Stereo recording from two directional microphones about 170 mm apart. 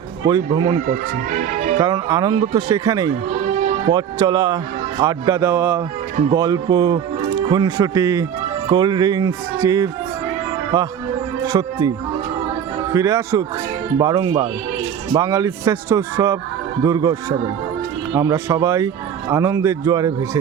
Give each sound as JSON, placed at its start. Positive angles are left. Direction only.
{"t": 0.3, "sound": "a man's voice", "side_deg": -20}
{"t": 0.9, "sound": "speech", "side_deg": -45}
{"t": 1.8, "sound": "a man's voice", "side_deg": -20}
{"t": 3.2, "sound": "music", "side_deg": -40}
{"t": 3.8, "sound": "a man's voice", "side_deg": -25}
{"t": 11.4, "sound": "speech", "side_deg": -20}
{"t": 12.9, "sound": "a man's voice", "side_deg": -20}